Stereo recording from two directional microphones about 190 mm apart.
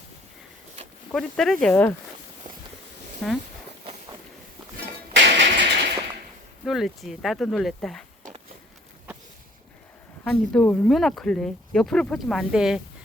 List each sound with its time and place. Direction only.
1.1 s speech: centre (ahead or behind)
3.2 s speech: centre (ahead or behind)
5.1 s a sound: 65° right (ahead or behind)
6.7 s speech: centre (ahead or behind)
10.2 s speech: 5° left (ahead or behind)